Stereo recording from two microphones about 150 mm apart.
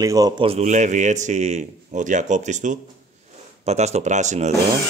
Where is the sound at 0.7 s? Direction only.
55° right (ahead or behind).